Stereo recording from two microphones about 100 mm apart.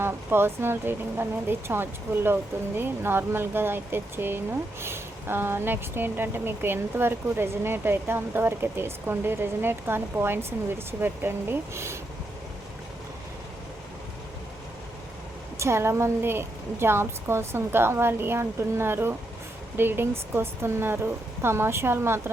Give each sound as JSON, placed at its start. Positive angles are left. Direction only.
{"t": 0.0, "sound": "speech", "side_deg": -25}
{"t": 15.5, "sound": "speech", "side_deg": -25}